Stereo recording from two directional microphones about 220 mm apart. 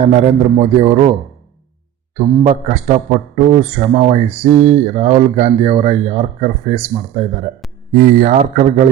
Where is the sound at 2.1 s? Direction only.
30° right (ahead or behind).